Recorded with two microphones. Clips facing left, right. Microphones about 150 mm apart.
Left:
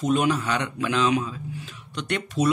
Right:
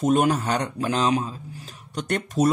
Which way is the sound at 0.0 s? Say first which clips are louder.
Right 2 dB; 45° right (ahead or behind).